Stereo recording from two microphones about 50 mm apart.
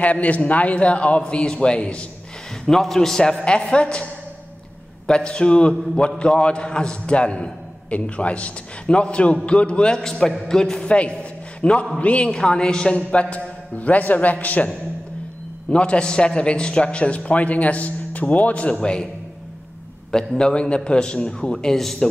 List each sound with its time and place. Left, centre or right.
0.0 s a man's voice: left
2.6 s a man's voice: centre; by 9.9 s left
9.9 s a man's voice: centre
10.9 s a man's voice: left
12.3 s a man's voice: centre; by 14.7 s left
15.7 s a man's voice: left
20.1 s a man's voice: centre